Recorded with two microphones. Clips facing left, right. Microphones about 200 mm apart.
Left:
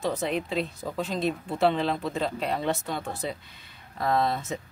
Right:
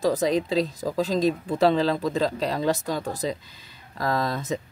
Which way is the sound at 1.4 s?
90° right.